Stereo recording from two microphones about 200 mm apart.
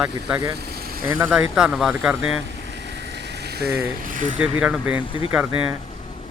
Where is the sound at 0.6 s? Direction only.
50° right (ahead or behind).